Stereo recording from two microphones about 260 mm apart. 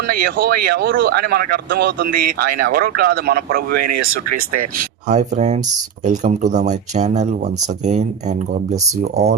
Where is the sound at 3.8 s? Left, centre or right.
Right.